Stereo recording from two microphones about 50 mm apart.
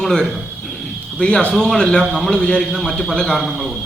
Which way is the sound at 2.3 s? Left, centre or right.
Centre.